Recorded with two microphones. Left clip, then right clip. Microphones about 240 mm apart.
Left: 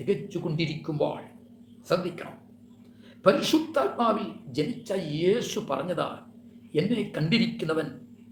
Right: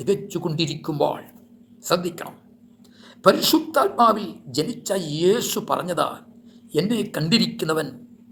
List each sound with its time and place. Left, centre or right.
0.0 s speech: right
3.5 s speech: right